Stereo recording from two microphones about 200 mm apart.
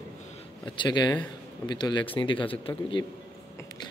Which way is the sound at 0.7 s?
20° left (ahead or behind).